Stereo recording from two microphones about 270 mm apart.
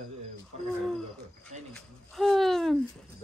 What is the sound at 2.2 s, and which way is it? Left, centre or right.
Speech, centre.